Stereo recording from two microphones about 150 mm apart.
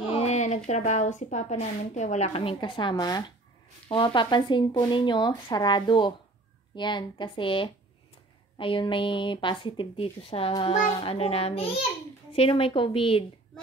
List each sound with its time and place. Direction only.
0.1 s speech: 45° left (ahead or behind)